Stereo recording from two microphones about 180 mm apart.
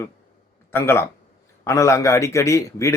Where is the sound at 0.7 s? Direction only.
15° left (ahead or behind).